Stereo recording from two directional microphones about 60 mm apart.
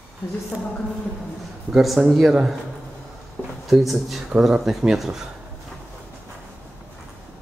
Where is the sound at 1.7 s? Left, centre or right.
Centre.